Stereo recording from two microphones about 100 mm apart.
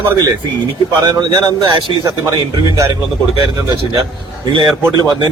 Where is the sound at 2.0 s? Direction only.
30° right (ahead or behind).